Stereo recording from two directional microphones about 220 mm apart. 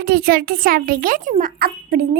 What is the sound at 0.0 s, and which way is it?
A child's voice, 45° right (ahead or behind).